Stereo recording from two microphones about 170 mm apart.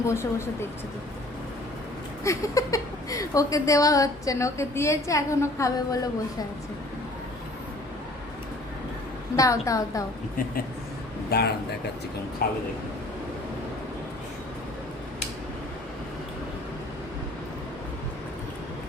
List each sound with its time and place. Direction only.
0.0 s speech: 15° left (ahead or behind)
2.2 s a woman's voice: 20° left (ahead or behind)
9.3 s a woman's voice: 20° left (ahead or behind)
11.3 s speech: 70° left (ahead or behind)